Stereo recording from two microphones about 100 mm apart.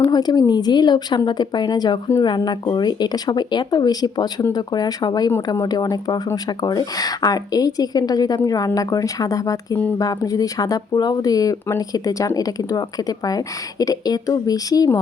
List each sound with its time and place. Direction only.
0.1 s speech: 40° left (ahead or behind)